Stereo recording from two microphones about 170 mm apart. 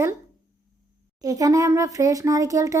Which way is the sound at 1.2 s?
20° right (ahead or behind).